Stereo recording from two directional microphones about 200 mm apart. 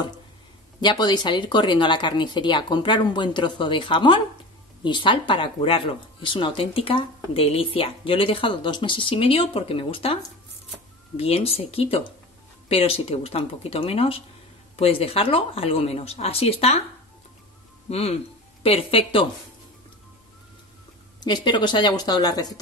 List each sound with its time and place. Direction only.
0.7 s speech: 20° left (ahead or behind)
17.8 s speech: 30° left (ahead or behind)
21.2 s speech: 20° left (ahead or behind)